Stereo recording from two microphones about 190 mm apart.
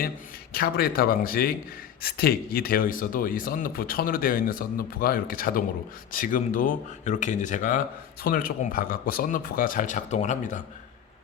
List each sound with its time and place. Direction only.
0.5 s speech: 55° left (ahead or behind)